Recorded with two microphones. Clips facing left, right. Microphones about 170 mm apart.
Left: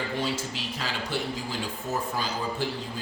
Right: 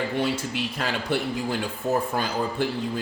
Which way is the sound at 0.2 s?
60° right (ahead or behind).